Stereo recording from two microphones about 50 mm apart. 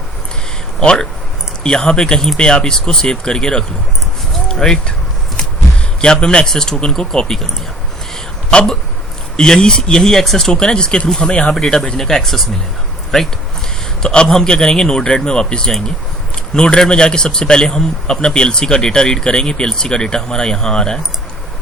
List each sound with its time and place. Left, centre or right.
0.8 s a man's voice: centre
6.0 s a man's voice: centre
8.5 s a man's voice: centre
14.0 s a man's voice: centre